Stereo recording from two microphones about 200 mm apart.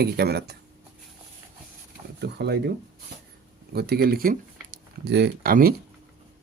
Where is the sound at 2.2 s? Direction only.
55° right (ahead or behind).